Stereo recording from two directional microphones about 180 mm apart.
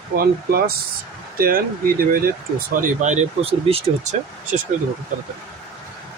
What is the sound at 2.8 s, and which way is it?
Speech, 40° right (ahead or behind).